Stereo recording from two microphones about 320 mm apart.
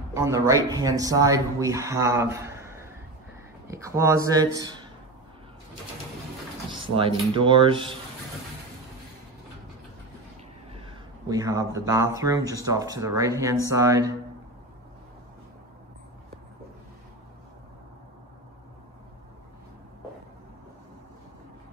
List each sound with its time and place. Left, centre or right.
0.1 s speech: centre
6.8 s speech: centre
10.7 s speech: centre